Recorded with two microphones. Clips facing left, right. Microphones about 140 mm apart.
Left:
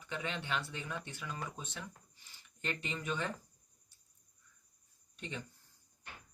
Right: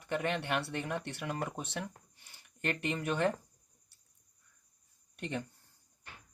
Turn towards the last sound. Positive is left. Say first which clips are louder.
# right 6 dB
turn(degrees=-55)  # may be behind; listen again after turning